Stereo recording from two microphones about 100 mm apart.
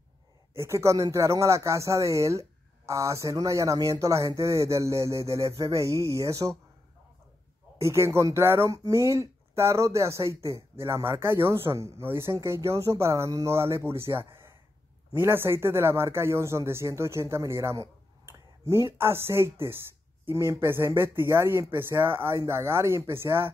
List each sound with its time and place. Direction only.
0.6 s speech: 30° right (ahead or behind)
7.8 s speech: 30° right (ahead or behind)